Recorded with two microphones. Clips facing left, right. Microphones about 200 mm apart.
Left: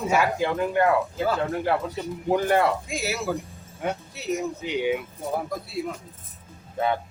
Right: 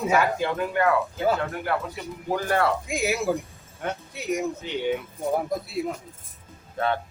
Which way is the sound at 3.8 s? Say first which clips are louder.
Left 1 dB; 15° left (ahead or behind).